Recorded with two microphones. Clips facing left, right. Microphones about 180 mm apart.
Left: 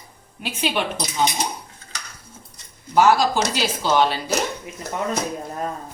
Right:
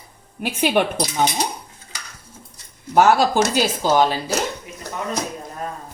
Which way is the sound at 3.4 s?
45° right (ahead or behind).